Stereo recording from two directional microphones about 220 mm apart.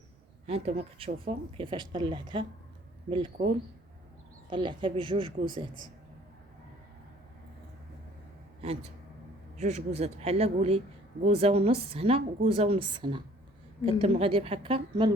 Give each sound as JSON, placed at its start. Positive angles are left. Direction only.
{"t": 0.4, "sound": "speech", "side_deg": -25}
{"t": 8.6, "sound": "speech", "side_deg": -25}